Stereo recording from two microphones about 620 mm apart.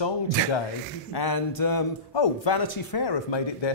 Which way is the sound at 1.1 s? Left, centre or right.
Left.